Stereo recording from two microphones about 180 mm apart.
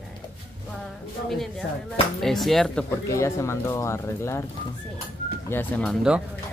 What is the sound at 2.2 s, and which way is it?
Speech, centre (ahead or behind).